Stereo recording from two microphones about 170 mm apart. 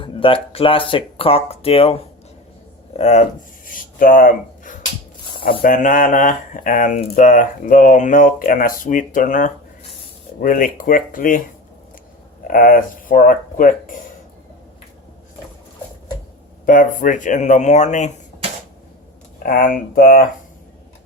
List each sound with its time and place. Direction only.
0.0 s speech: 30° left (ahead or behind)
3.7 s speech: 55° left (ahead or behind)
12.5 s speech: 55° left (ahead or behind)
16.6 s speech: 50° left (ahead or behind)
19.4 s speech: 55° left (ahead or behind)